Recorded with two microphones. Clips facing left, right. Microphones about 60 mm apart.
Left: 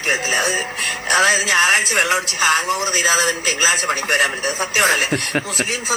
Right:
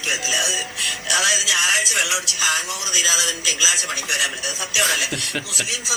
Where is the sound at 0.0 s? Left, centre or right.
Left.